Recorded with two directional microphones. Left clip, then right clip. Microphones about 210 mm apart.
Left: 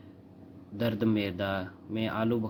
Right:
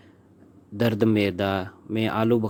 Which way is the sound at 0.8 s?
45° right (ahead or behind).